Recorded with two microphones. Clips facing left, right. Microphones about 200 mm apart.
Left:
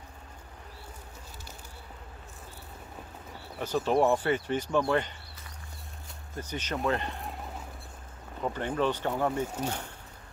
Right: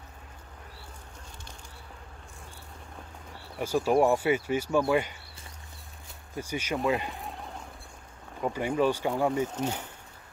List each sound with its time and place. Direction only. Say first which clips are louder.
3.5 s speech: right 2 dB; 10° right (ahead or behind)
6.3 s speech: right 3 dB; 10° right (ahead or behind)
8.4 s speech: right 3 dB; 10° right (ahead or behind)